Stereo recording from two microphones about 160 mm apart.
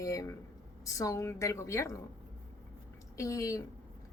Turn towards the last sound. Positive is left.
turn(degrees=20)  # may be behind; listen again after turning